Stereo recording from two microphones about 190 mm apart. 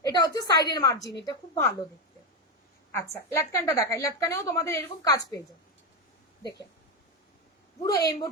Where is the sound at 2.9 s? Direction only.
15° left (ahead or behind).